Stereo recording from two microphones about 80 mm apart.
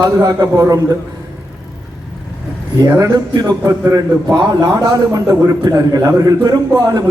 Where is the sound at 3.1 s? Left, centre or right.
Right.